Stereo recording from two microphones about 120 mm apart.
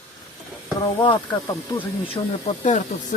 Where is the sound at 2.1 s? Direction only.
80° left.